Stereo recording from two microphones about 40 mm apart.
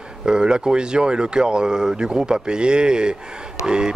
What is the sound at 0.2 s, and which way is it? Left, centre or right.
Speech, centre.